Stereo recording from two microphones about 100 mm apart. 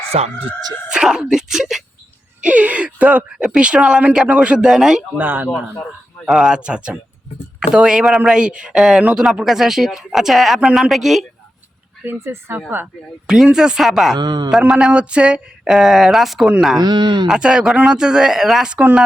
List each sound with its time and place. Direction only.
0.1 s speech: 90° right
0.9 s speech: 5° right (ahead or behind)
5.1 s speech: 20° right (ahead or behind)
6.2 s speech: 5° right (ahead or behind)
12.0 s speech: 25° right (ahead or behind)
13.2 s speech: 5° right (ahead or behind)
14.2 s speech: 45° right (ahead or behind)
14.5 s speech: 10° right (ahead or behind)
16.7 s speech: 45° right (ahead or behind)
17.2 s speech: 5° right (ahead or behind)